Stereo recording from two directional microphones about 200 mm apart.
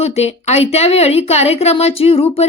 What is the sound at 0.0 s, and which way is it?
Speech, 30° left (ahead or behind).